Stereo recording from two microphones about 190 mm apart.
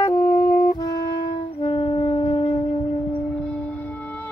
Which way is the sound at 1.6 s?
25° left (ahead or behind).